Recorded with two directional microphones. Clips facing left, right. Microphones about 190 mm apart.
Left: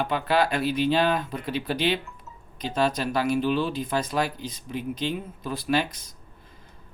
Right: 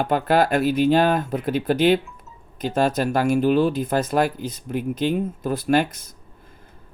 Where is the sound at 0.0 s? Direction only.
45° right (ahead or behind).